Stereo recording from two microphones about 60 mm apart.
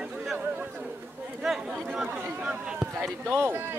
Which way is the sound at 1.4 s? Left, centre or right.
Centre.